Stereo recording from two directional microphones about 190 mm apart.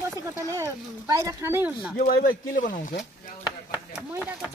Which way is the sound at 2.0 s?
50° left (ahead or behind).